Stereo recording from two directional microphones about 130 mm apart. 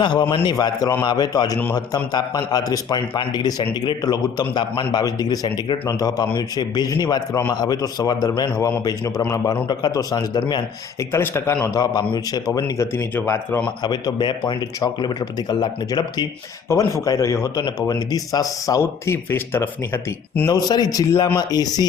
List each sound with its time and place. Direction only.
0.0 s a man's voice: 35° left (ahead or behind); by 13.7 s 15° left (ahead or behind)
13.8 s a man's voice: 35° left (ahead or behind); by 20.5 s 20° left (ahead or behind)
20.5 s a man's voice: 30° left (ahead or behind)